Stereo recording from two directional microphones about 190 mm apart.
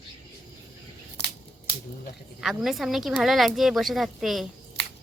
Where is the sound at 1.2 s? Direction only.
60° left (ahead or behind).